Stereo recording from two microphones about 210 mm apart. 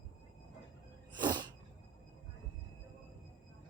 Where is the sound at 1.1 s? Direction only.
20° right (ahead or behind).